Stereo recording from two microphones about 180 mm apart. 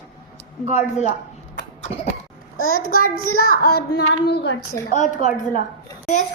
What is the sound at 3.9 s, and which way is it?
Child singing, 70° left (ahead or behind).